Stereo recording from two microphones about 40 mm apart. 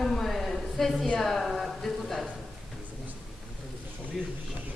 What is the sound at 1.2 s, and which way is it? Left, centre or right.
Speech, centre.